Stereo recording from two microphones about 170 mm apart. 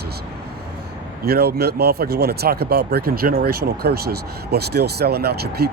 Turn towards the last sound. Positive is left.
turn(degrees=-70)  # may be behind; listen again after turning